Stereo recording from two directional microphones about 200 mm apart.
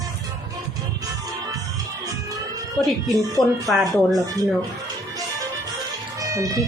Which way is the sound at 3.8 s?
20° right (ahead or behind).